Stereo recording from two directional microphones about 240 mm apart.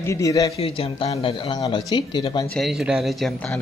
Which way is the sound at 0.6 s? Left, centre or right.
Left.